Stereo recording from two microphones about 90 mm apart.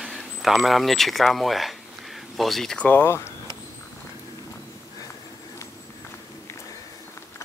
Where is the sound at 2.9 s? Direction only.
25° left (ahead or behind).